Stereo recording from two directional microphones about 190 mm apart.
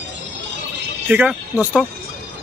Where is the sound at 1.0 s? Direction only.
10° right (ahead or behind).